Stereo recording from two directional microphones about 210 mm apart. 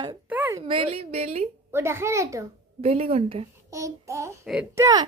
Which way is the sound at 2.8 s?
30° right (ahead or behind).